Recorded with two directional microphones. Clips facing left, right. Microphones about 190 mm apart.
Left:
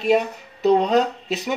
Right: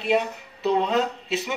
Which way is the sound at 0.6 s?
40° left (ahead or behind).